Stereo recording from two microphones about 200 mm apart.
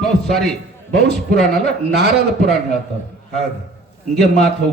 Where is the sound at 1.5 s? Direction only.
55° right (ahead or behind).